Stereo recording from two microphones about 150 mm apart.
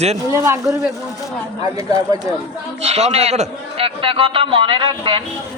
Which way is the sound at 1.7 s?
20° right (ahead or behind).